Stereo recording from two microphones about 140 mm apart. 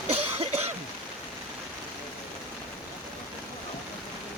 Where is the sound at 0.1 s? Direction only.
45° right (ahead or behind).